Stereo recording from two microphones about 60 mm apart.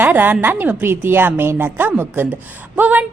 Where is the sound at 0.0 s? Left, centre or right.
Right.